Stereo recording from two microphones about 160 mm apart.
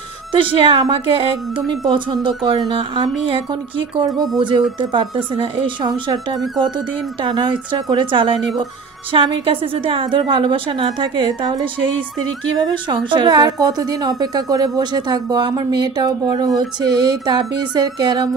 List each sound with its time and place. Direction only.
0.3 s a woman's voice: 30° right (ahead or behind)
4.4 s a woman's voice: 30° right (ahead or behind)
7.2 s a woman's voice: 30° right (ahead or behind)
12.5 s a woman's voice: 25° right (ahead or behind)